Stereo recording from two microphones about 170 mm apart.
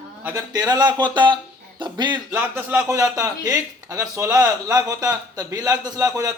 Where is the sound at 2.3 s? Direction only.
10° right (ahead or behind).